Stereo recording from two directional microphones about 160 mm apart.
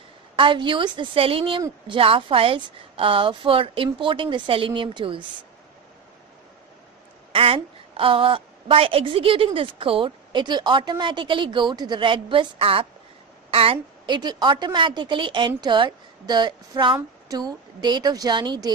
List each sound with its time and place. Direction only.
0.4 s a woman's voice: 30° right (ahead or behind)
7.3 s a woman's voice: 35° right (ahead or behind)